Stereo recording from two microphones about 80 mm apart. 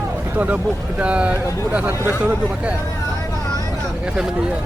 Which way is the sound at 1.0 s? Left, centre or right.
Centre.